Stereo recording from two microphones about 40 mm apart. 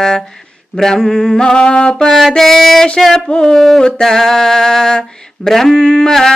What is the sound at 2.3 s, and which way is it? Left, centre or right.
Music, centre.